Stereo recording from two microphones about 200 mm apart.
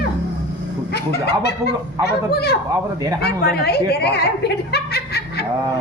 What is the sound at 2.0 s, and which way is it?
Speech, 55° left (ahead or behind).